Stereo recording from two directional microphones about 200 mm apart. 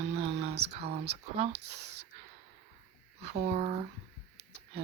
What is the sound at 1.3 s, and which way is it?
Speech, 30° right (ahead or behind).